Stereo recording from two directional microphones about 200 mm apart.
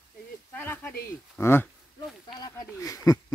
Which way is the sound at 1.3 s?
10° left (ahead or behind).